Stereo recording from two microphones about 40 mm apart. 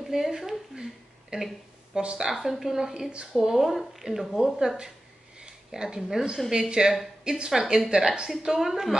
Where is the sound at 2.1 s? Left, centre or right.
Centre.